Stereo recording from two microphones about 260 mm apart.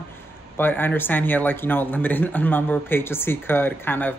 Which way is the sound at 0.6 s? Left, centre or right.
Centre.